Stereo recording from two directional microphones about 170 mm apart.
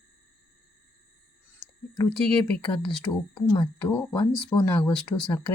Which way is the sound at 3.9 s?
10° left (ahead or behind).